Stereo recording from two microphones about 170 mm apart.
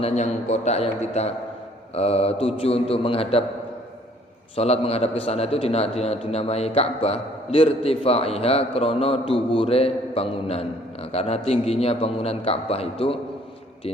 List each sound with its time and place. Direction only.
0.0 s a man's voice: 40° left (ahead or behind)
4.5 s a man's voice: 35° left (ahead or behind)